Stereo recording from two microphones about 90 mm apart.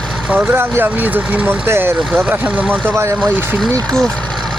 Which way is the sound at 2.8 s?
30° right (ahead or behind).